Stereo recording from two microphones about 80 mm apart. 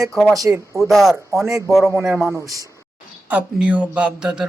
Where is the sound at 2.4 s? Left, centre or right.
Right.